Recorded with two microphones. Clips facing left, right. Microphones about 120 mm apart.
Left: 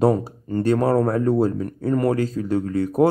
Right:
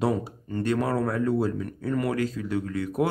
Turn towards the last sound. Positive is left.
turn(degrees=35)  # may be behind; listen again after turning